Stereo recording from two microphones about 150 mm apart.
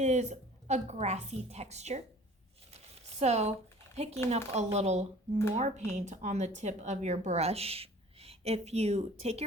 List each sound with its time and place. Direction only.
0.0 s speech: 50° right (ahead or behind)
2.7 s a sound: 45° right (ahead or behind)
3.9 s speech: 45° right (ahead or behind)